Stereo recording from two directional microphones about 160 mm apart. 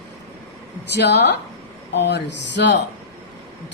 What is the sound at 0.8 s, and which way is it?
A woman's voice, 90° left.